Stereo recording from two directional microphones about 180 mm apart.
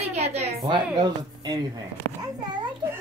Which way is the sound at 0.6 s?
25° right (ahead or behind).